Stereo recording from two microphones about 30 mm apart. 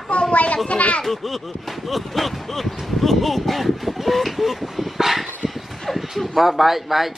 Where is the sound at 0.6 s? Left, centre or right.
Left.